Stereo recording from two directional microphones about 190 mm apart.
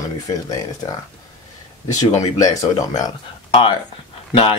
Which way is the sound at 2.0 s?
20° left (ahead or behind).